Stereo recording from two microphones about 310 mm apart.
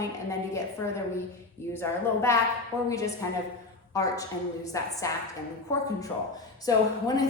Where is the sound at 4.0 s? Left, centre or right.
Centre.